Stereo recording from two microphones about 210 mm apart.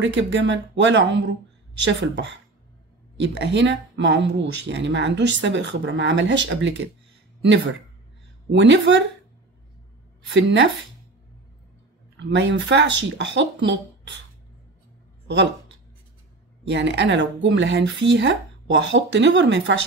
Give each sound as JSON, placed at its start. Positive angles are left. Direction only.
{"t": 0.0, "sound": "speech", "side_deg": -60}
{"t": 8.5, "sound": "speech", "side_deg": -60}
{"t": 10.3, "sound": "speech", "side_deg": -60}
{"t": 12.2, "sound": "speech", "side_deg": -60}
{"t": 16.6, "sound": "speech", "side_deg": -55}